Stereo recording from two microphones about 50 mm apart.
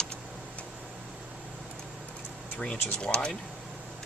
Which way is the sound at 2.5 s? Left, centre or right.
Left.